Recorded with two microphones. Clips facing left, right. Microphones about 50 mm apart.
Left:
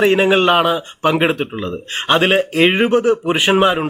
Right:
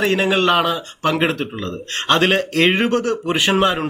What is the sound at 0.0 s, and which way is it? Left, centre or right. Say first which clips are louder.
Speech: left 4 dB; centre.